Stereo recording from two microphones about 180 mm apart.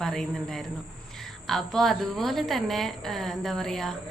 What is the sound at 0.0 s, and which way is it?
Speech, 5° left (ahead or behind).